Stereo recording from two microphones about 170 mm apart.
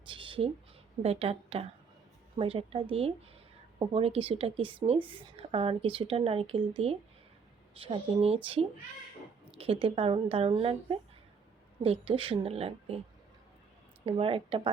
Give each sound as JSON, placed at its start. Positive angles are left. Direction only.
{"t": 0.1, "sound": "a sound", "side_deg": -30}
{"t": 1.0, "sound": "a woman's voice", "side_deg": -35}
{"t": 9.5, "sound": "a woman's voice", "side_deg": -35}
{"t": 14.0, "sound": "a woman's voice", "side_deg": -35}